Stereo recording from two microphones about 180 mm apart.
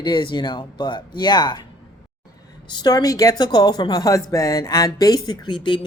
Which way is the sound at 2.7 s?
25° left (ahead or behind).